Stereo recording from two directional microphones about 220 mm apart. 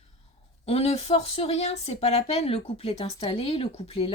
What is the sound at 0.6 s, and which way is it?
Speech, 25° left (ahead or behind).